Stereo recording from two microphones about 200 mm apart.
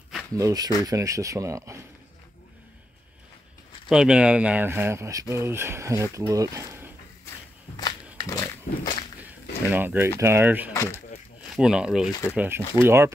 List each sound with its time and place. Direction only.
0.4 s speech: 15° right (ahead or behind)
3.9 s speech: 5° right (ahead or behind)
7.8 s a sound: 20° left (ahead or behind)
9.7 s speech: 10° right (ahead or behind)
10.7 s speech: 15° left (ahead or behind)
11.5 s speech: 5° right (ahead or behind)